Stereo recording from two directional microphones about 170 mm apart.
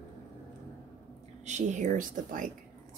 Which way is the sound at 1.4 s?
45° right (ahead or behind).